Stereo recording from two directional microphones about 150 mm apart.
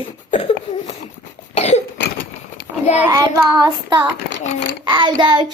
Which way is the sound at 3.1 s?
25° right (ahead or behind).